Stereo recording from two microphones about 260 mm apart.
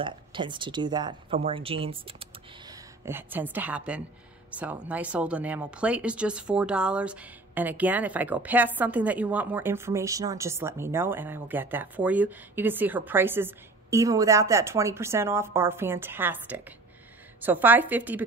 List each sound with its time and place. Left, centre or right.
0.0 s speech: centre
2.7 s a woman's voice: centre